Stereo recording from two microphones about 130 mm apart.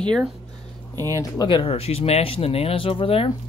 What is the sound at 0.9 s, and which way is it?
Speech, 25° right (ahead or behind).